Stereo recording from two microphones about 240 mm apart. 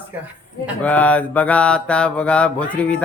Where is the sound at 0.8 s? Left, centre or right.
Centre.